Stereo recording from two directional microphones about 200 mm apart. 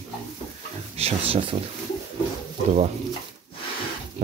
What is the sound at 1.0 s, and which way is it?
Speech, 25° right (ahead or behind).